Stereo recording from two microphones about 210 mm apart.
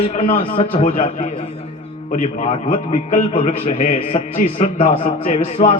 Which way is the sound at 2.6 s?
40° left (ahead or behind).